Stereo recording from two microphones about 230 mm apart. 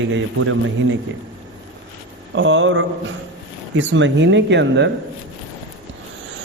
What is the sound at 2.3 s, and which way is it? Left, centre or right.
A man's voice, right.